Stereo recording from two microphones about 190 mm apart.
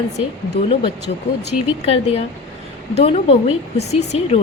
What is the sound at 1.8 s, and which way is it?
Speech, 30° left (ahead or behind).